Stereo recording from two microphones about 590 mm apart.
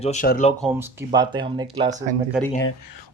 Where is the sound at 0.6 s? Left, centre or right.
Centre.